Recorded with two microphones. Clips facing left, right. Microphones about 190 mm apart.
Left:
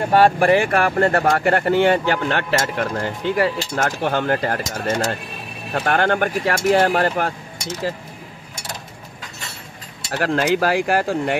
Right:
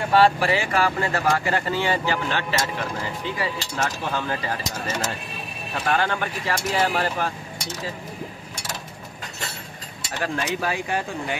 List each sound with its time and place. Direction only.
0.1 s speech: 50° left (ahead or behind)
10.1 s speech: 75° left (ahead or behind)